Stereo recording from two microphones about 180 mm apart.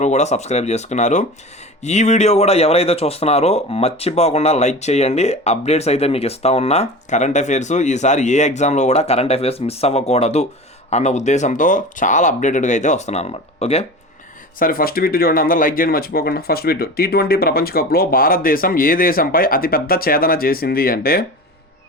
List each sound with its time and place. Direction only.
0.0 s speech: 40° left (ahead or behind)
14.6 s speech: 55° left (ahead or behind)